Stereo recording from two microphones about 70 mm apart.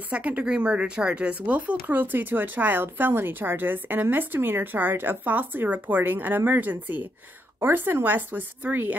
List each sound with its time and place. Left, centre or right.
0.1 s speech: centre